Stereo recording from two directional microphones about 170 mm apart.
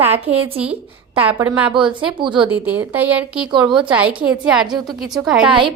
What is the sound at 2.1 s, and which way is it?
Speech, 30° right (ahead or behind).